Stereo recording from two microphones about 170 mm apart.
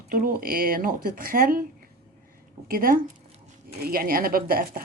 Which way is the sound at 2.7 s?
60° right (ahead or behind).